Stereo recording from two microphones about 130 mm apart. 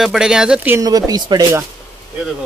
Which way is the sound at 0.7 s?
30° right (ahead or behind).